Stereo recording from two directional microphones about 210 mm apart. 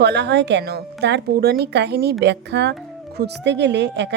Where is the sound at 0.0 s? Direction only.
55° right (ahead or behind).